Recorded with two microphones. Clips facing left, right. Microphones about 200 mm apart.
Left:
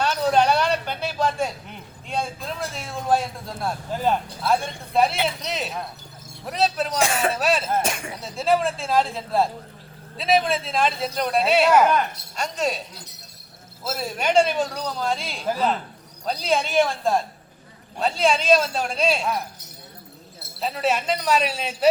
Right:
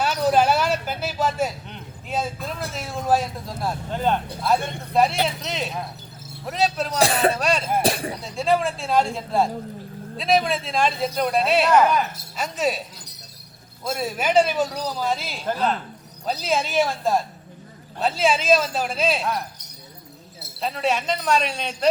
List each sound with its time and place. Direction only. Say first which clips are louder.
0.0 s a sound: right 1 dB; 5° right (ahead or behind)
2.0 s vehicle: right 1 dB; 5° right (ahead or behind)
2.7 s a man's voice: right 1 dB; centre (ahead or behind)
7.0 s speech: right 4 dB; 35° right (ahead or behind)
7.3 s a man's voice: left 1 dB; 5° left (ahead or behind)
7.8 s a sound: right 3 dB; 35° right (ahead or behind)
8.2 s a man's voice: left 1 dB; centre (ahead or behind)